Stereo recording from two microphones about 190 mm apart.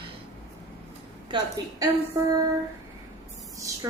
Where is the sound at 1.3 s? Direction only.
25° right (ahead or behind).